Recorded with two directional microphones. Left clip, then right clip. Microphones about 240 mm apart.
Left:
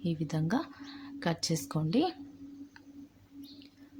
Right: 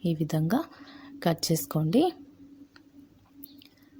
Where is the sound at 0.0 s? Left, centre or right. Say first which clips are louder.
Right 5 dB; right.